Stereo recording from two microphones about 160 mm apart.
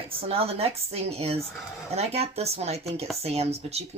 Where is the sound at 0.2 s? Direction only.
35° right (ahead or behind).